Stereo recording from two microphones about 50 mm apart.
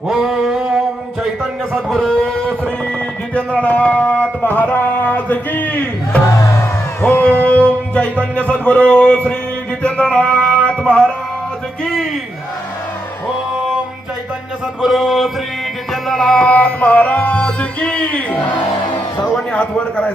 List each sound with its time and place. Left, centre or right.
0.1 s a sound: centre
1.7 s speech: centre
3.3 s music: left
8.2 s a man's voice: left
9.8 s music: left
14.8 s mantra: centre
15.9 s music: centre
16.5 s music: left
19.5 s a man's voice: left